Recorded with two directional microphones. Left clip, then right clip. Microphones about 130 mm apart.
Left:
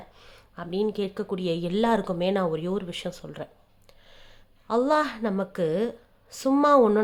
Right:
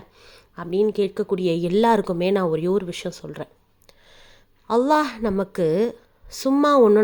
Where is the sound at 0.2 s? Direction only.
20° right (ahead or behind).